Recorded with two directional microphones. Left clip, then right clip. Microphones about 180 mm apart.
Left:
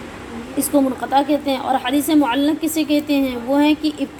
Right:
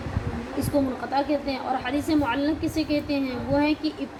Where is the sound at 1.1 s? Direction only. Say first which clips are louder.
Left 8 dB; 40° left (ahead or behind).